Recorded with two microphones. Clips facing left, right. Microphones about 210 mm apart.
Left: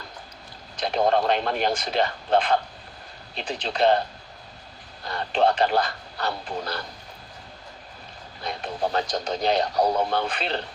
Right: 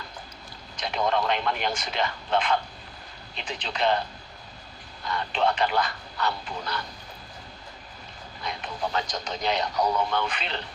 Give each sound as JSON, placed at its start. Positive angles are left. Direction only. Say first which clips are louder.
{"t": 0.8, "sound": "speech", "louder": "left 4 dB", "side_deg": 40}
{"t": 5.0, "sound": "speech", "louder": "left 4 dB", "side_deg": 40}
{"t": 8.4, "sound": "speech", "louder": "left 4 dB", "side_deg": 40}